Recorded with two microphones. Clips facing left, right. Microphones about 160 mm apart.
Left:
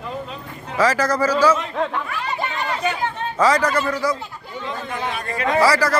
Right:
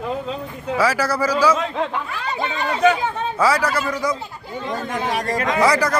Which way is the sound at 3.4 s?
10° right (ahead or behind).